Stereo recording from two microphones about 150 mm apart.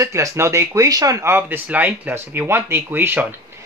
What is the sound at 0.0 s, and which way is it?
Speech, 20° right (ahead or behind).